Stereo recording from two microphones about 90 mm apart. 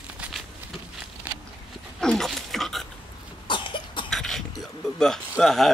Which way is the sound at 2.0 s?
5° left (ahead or behind).